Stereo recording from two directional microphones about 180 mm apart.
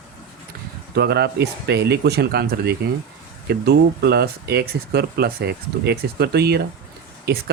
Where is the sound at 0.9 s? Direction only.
65° right (ahead or behind).